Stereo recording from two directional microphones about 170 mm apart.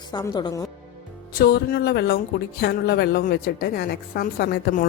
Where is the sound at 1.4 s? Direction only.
65° left (ahead or behind).